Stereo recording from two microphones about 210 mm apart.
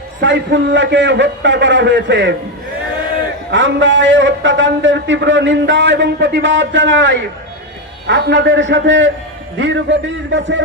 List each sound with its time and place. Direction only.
0.2 s a man's voice: 60° right (ahead or behind)
3.5 s a man's voice: 60° right (ahead or behind)